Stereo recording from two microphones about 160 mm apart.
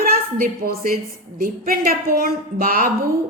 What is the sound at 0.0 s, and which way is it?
A woman's voice, 65° right (ahead or behind).